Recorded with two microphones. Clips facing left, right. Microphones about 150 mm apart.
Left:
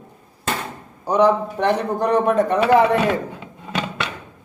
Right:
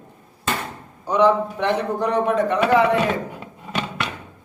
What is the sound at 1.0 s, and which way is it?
A man's voice, 40° left (ahead or behind).